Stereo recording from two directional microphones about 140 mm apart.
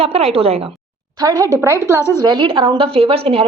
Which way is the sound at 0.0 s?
50° right (ahead or behind).